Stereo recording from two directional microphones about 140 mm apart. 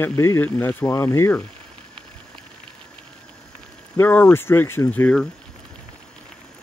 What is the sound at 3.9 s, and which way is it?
Speech, 15° left (ahead or behind).